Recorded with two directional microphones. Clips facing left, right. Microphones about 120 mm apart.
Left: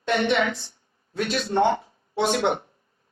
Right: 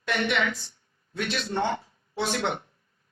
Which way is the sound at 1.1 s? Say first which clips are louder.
Left 4 dB; 40° left (ahead or behind).